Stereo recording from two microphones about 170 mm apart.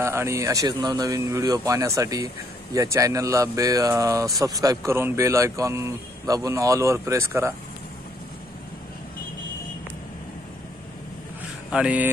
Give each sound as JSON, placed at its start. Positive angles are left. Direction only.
{"t": 0.0, "sound": "speech", "side_deg": -15}
{"t": 11.7, "sound": "speech", "side_deg": -5}